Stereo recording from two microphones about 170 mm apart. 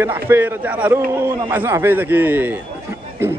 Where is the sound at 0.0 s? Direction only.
10° right (ahead or behind).